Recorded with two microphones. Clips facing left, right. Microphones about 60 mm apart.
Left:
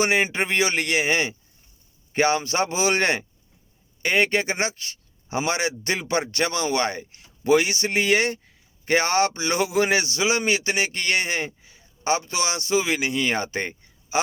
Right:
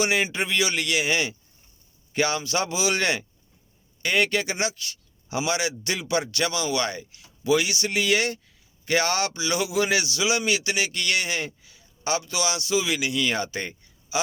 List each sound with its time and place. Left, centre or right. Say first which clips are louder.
0.0 s a man's voice: left 2 dB; left